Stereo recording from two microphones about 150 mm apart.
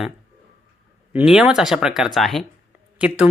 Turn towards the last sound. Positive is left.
turn(degrees=-10)  # may be behind; listen again after turning